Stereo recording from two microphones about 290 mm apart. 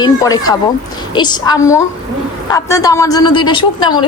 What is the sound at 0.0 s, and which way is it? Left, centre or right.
A woman's voice, centre.